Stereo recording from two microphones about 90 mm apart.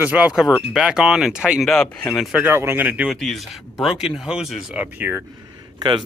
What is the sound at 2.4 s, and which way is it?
Speech, 25° right (ahead or behind).